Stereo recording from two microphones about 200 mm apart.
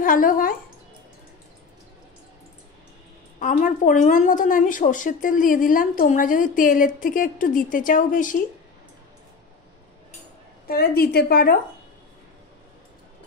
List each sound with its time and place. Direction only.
0.0 s a woman's voice: 40° left (ahead or behind)
3.3 s a woman's voice: 40° left (ahead or behind)
10.7 s a woman's voice: 50° left (ahead or behind)